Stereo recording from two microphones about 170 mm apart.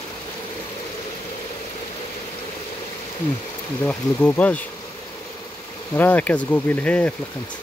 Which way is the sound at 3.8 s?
10° left (ahead or behind).